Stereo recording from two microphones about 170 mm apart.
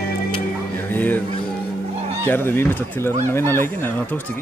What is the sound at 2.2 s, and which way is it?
Speech, 15° left (ahead or behind).